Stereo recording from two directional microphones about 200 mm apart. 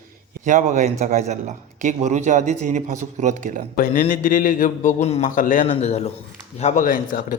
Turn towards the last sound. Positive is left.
turn(degrees=40)  # may be behind; listen again after turning